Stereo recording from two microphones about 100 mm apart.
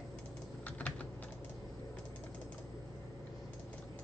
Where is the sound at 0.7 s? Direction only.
15° left (ahead or behind).